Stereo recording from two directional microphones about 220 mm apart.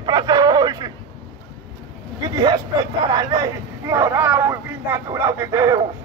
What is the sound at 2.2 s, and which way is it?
Speech, 20° right (ahead or behind).